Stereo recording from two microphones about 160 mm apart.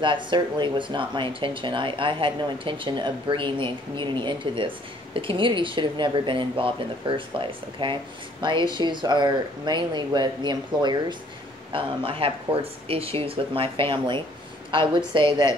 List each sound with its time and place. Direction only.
0.0 s speech: 30° right (ahead or behind)